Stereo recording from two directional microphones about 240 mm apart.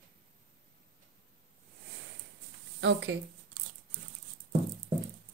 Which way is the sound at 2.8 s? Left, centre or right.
Right.